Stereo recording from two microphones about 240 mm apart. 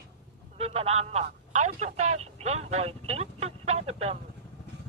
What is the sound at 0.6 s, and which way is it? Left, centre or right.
Speech, right.